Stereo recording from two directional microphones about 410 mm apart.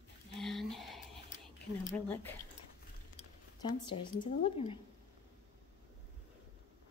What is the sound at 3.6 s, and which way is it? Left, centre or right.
Speech, centre.